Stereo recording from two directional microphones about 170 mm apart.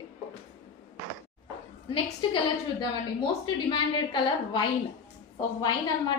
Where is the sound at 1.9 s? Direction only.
30° left (ahead or behind).